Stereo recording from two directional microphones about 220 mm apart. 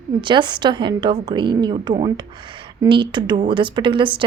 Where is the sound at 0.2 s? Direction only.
20° right (ahead or behind).